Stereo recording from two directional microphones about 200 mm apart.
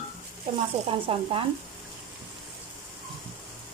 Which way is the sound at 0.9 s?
25° right (ahead or behind).